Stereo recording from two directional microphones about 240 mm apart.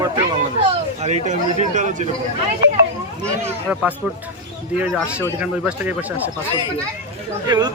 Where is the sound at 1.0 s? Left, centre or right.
Right.